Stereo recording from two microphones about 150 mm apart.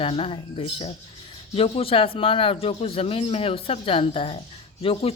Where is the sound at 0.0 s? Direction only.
35° left (ahead or behind).